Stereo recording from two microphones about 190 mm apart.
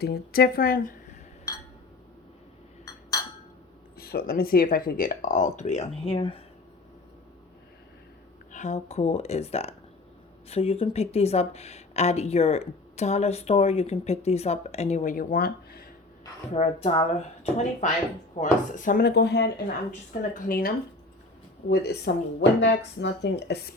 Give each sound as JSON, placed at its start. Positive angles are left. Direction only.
{"t": 0.0, "sound": "speech", "side_deg": 55}
{"t": 3.9, "sound": "speech", "side_deg": 55}
{"t": 8.5, "sound": "speech", "side_deg": 35}
{"t": 16.5, "sound": "speech", "side_deg": 35}
{"t": 20.3, "sound": "speech", "side_deg": 45}
{"t": 21.7, "sound": "speech", "side_deg": 60}